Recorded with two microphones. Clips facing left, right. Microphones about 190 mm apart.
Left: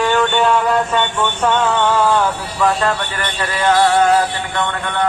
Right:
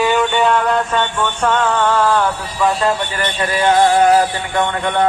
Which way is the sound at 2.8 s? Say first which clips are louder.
Right 2 dB; 25° right (ahead or behind).